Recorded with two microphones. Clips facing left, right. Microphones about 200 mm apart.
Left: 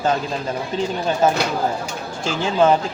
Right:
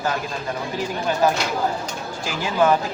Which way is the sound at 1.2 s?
25° left (ahead or behind).